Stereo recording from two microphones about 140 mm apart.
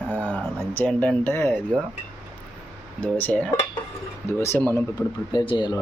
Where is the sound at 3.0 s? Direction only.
10° left (ahead or behind).